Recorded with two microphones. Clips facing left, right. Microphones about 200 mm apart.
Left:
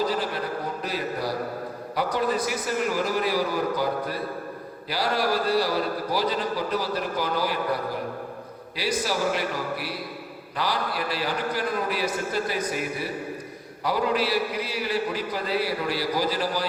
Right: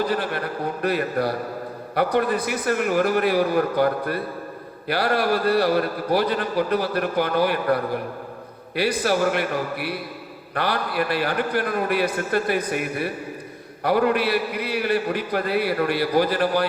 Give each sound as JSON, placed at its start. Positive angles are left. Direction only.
{"t": 0.0, "sound": "a man's voice", "side_deg": -60}